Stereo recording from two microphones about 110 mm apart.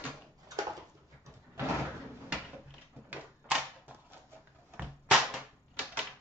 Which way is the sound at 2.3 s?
10° right (ahead or behind).